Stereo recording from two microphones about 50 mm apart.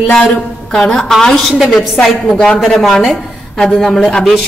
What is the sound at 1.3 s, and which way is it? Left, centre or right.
A woman's voice, centre.